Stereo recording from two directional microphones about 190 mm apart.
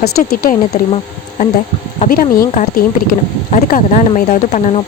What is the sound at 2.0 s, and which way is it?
Speech, 50° left (ahead or behind).